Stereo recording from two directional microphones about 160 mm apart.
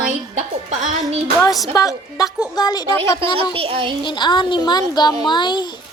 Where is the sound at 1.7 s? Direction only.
20° left (ahead or behind).